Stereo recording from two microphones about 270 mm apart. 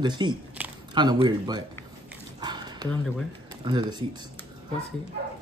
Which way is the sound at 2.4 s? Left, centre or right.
Centre.